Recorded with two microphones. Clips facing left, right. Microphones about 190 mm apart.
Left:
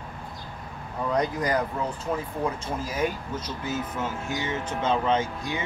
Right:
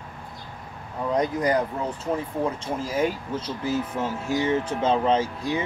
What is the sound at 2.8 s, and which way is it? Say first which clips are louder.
Speech: right 4 dB; 30° right (ahead or behind).